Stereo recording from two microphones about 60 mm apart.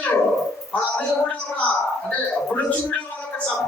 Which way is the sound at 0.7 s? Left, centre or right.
Left.